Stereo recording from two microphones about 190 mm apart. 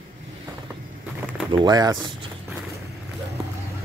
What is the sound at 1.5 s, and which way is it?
Speech, 20° right (ahead or behind).